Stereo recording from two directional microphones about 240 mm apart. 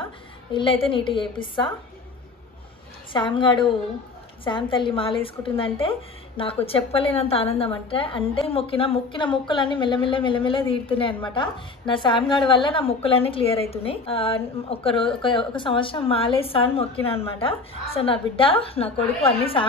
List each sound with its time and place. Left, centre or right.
0.0 s a woman's voice: left
3.1 s speech: centre